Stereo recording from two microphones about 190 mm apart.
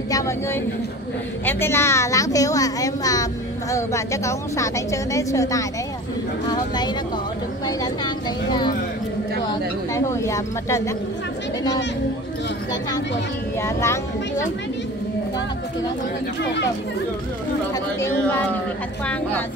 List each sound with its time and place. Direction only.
0.1 s a woman's voice: 15° left (ahead or behind)
9.9 s a woman's voice: 15° left (ahead or behind)
13.6 s a woman's voice: 15° left (ahead or behind)
17.7 s a woman's voice: 15° left (ahead or behind)